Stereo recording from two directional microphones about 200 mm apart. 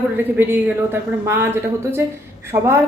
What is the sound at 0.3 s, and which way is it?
A woman's voice, 10° right (ahead or behind).